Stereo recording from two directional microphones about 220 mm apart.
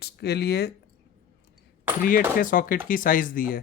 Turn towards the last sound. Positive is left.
turn(degrees=40)  # may be behind; listen again after turning